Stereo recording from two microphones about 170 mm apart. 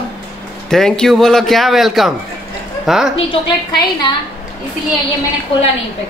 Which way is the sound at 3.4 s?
35° left (ahead or behind).